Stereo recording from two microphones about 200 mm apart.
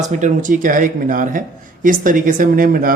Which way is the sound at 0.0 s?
35° right (ahead or behind).